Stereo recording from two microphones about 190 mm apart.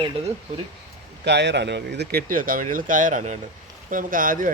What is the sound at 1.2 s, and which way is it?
Speech, 65° right (ahead or behind).